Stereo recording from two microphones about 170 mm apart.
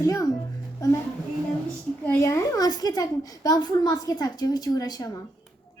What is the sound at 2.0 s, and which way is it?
A woman's voice, 15° left (ahead or behind).